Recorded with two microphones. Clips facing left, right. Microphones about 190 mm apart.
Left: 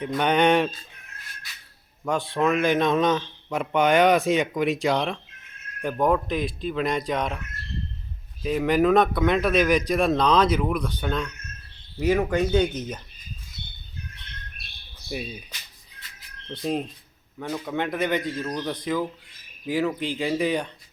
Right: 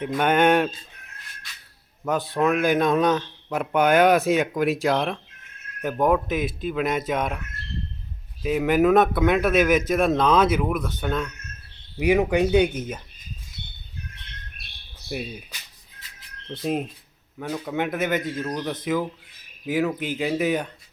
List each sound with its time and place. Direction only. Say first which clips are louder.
0.0 s speech: right 1 dB; 5° right (ahead or behind)
2.0 s speech: right 1 dB; 5° right (ahead or behind)
8.4 s speech: right 1 dB; 5° right (ahead or behind)
11.9 s speech: right 2 dB; 15° right (ahead or behind)
15.1 s speech: right 1 dB; 5° right (ahead or behind)
16.6 s speech: right 1 dB; 5° right (ahead or behind)